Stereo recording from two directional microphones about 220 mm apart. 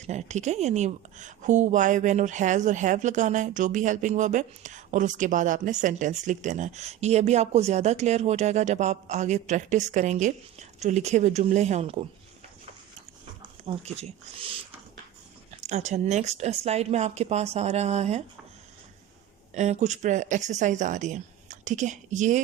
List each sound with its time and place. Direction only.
0.0 s a woman's voice: 30° right (ahead or behind)
13.7 s a woman's voice: 30° right (ahead or behind)
15.6 s a woman's voice: 30° right (ahead or behind)
19.5 s a woman's voice: 30° right (ahead or behind)